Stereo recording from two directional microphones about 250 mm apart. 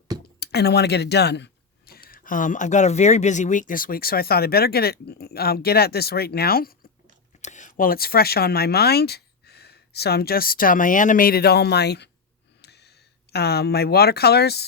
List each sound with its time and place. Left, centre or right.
0.3 s speech: left
12.6 s a sound: left
13.3 s speech: left